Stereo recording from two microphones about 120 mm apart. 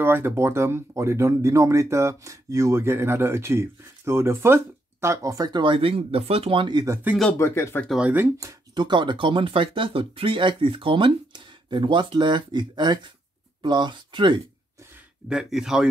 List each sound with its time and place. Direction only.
0.0 s speech: 20° right (ahead or behind); by 7.0 s 35° right (ahead or behind)
7.3 s speech: 20° left (ahead or behind)
8.0 s speech: 15° right (ahead or behind)
8.4 s a sound: 25° right (ahead or behind)
8.8 s speech: 40° right (ahead or behind)
14.8 s a sound: 20° right (ahead or behind)
15.2 s speech: 5° right (ahead or behind)